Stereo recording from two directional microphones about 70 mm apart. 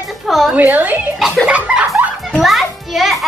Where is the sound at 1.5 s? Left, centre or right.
Centre.